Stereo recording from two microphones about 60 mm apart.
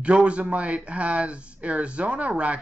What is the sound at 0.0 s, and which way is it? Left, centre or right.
A man's voice, centre.